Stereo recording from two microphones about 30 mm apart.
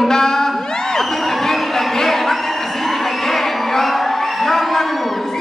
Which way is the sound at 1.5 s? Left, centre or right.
Centre.